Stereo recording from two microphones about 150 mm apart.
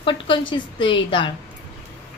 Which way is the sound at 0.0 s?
35° left (ahead or behind).